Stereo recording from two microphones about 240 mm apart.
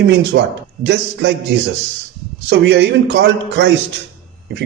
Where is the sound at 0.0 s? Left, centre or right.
Right.